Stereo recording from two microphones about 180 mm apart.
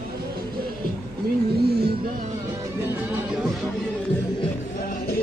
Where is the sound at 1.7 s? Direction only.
60° right (ahead or behind).